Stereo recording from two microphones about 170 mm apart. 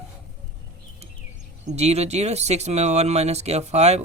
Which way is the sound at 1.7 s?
40° right (ahead or behind).